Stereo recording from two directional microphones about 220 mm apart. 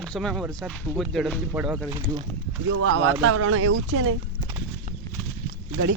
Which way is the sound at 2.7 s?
60° right (ahead or behind).